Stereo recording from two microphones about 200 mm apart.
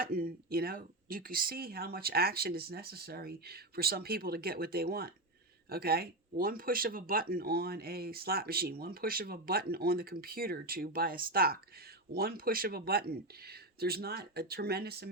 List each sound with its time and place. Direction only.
0.0 s speech: 45° right (ahead or behind)